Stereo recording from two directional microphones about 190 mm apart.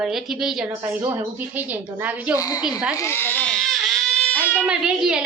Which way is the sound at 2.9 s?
15° left (ahead or behind).